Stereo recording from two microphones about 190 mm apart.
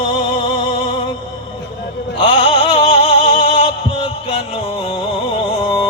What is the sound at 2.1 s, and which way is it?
Music, 25° left (ahead or behind).